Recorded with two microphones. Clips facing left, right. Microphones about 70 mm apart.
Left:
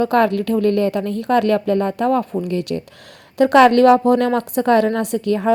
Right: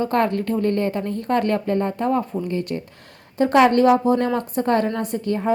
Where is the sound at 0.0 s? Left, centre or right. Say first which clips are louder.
Left 4 dB; left.